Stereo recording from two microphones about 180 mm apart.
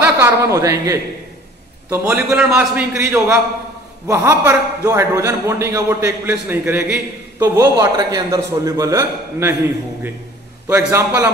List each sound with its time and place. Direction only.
0.0 s a man's voice: 15° right (ahead or behind)
10.7 s a man's voice: 15° right (ahead or behind)